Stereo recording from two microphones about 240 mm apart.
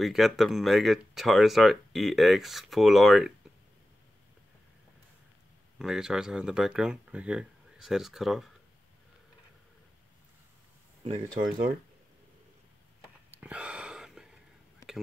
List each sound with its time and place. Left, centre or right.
0.0 s speech: centre
5.8 s speech: centre
11.1 s speech: right
13.3 s a sound: centre